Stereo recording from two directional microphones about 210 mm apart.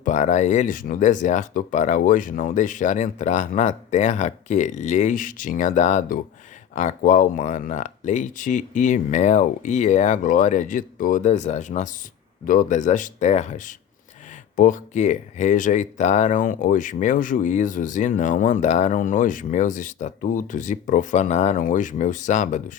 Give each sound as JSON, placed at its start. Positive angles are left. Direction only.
{"t": 0.0, "sound": "speech", "side_deg": 35}